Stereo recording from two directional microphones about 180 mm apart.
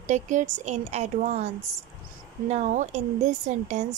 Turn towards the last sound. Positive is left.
turn(degrees=-40)  # may be behind; listen again after turning